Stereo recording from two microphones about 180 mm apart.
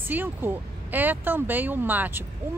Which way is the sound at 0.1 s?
10° right (ahead or behind).